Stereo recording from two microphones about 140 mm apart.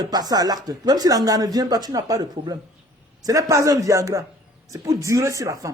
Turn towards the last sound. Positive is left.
turn(degrees=-25)  # may be behind; listen again after turning